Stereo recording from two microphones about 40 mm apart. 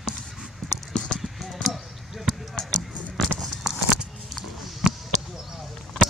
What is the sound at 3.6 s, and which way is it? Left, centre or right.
Clip-clop, centre.